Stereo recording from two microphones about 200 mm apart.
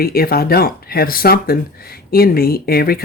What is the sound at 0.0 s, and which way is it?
Speech, 50° left (ahead or behind).